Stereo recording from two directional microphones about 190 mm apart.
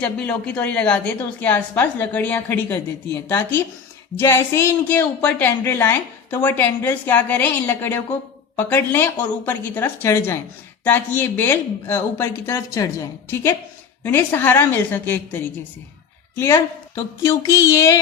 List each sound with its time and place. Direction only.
0.0 s a woman's voice: 5° left (ahead or behind)